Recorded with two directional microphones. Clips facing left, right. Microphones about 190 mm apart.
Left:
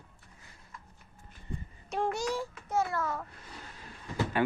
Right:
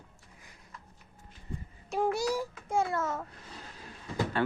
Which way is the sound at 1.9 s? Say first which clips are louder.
Right 2 dB; 5° right (ahead or behind).